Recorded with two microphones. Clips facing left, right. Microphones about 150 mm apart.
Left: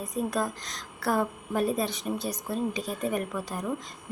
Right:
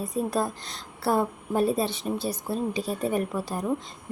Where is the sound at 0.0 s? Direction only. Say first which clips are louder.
Right 2 dB; 30° right (ahead or behind).